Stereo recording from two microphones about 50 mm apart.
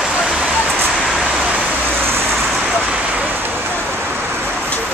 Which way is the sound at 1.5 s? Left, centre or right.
Right.